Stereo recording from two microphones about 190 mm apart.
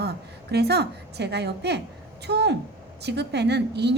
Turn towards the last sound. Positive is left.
turn(degrees=-60)  # may be behind; listen again after turning